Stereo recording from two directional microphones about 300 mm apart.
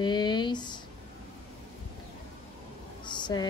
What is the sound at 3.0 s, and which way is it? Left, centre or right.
Vehicle, centre.